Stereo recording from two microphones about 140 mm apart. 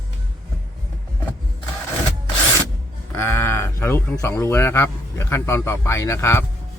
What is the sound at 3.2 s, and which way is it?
Speech, 15° left (ahead or behind).